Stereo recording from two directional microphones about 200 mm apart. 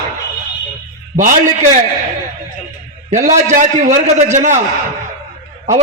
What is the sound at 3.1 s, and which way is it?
A man's voice, 40° right (ahead or behind).